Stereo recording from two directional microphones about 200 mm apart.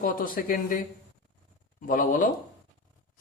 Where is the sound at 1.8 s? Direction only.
45° left (ahead or behind).